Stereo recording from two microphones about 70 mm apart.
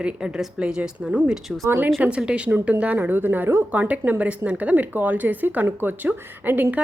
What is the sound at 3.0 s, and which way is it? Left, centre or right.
A woman's voice, right.